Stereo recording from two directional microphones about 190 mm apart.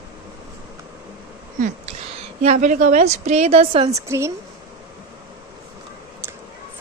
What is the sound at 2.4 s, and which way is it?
A woman's voice, 40° right (ahead or behind).